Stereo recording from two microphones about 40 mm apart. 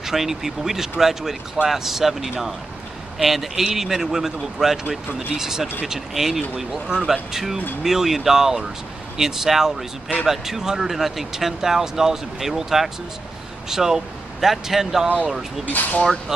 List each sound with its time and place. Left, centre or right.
0.0 s speech: centre
15.6 s speech: left